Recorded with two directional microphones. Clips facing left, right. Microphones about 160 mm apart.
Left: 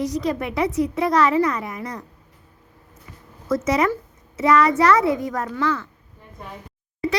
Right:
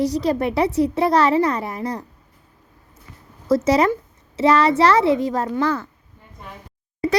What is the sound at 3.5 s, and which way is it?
A child's voice, 35° right (ahead or behind).